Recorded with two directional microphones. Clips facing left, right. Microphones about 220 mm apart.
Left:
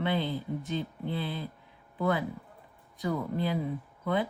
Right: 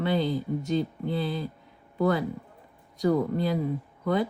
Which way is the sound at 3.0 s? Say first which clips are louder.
Right 6 dB; 45° right (ahead or behind).